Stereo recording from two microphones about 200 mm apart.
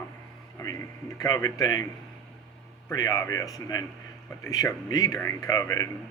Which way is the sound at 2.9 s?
20° left (ahead or behind).